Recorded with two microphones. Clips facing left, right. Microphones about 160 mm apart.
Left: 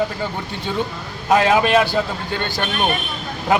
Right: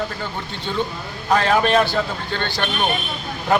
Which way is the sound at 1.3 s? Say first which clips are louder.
Left 2 dB; 5° left (ahead or behind).